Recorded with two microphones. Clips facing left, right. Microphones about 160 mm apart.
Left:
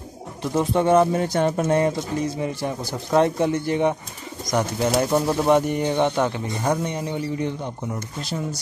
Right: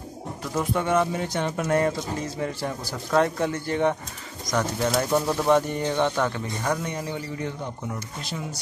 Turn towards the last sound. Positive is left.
turn(degrees=20)  # may be behind; listen again after turning